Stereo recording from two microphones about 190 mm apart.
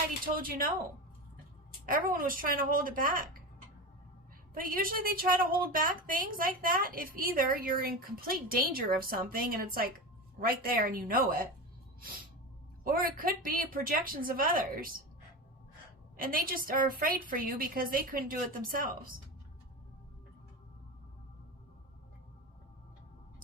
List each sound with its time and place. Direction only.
0.3 s a woman's voice: 50° right (ahead or behind)
1.9 s a woman's voice: 45° right (ahead or behind)
4.5 s a woman's voice: 50° right (ahead or behind)
12.8 s a woman's voice: 50° right (ahead or behind)
16.1 s a woman's voice: 50° right (ahead or behind)